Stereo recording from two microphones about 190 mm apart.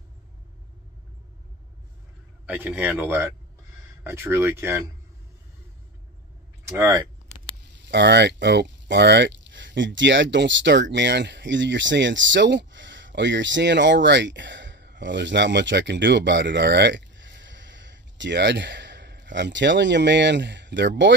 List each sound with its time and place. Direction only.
2.4 s speech: 10° right (ahead or behind)
7.9 s speech: 65° right (ahead or behind)